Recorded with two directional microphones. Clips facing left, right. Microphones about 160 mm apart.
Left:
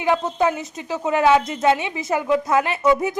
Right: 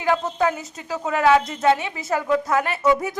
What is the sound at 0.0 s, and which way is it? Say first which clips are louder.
A woman's voice: left 1 dB; 20° left (ahead or behind).